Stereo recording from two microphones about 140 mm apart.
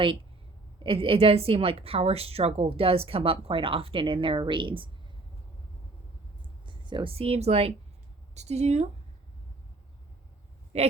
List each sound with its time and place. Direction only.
0.9 s a woman's voice: 40° right (ahead or behind)
6.4 s a sound: 35° right (ahead or behind)
8.4 s a woman's voice: 50° right (ahead or behind)
10.7 s a woman's voice: 50° right (ahead or behind)